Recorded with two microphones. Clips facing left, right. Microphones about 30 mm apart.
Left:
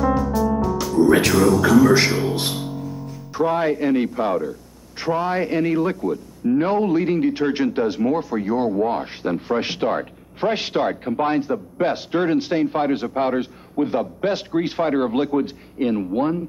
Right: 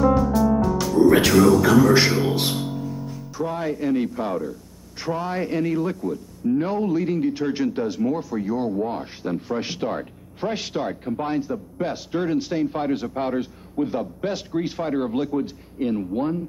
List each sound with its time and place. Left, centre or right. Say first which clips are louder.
0.0 s music: right 1 dB; centre
3.3 s a man's voice: left 7 dB; left